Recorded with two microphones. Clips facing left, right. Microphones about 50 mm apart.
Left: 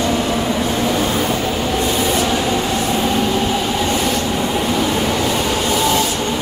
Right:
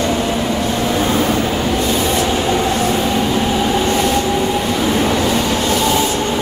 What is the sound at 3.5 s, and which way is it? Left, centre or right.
Train, right.